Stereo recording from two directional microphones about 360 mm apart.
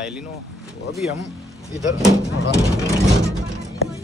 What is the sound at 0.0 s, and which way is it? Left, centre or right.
Speech, centre.